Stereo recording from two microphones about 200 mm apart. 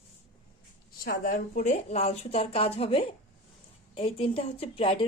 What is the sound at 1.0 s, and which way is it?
A woman's voice, 45° left (ahead or behind).